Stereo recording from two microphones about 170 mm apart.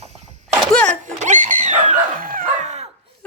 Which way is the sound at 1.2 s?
45° right (ahead or behind).